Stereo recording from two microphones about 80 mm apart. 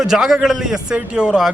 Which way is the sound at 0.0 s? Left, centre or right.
Centre.